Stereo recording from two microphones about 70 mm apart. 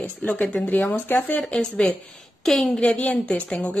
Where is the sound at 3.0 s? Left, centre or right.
Left.